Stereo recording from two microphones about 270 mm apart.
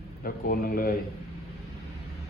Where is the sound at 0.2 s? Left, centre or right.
Left.